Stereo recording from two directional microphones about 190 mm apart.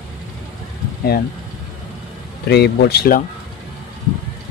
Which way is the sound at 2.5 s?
60° left (ahead or behind).